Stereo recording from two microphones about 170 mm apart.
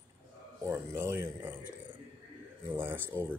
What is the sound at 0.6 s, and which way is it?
Speech, 15° right (ahead or behind).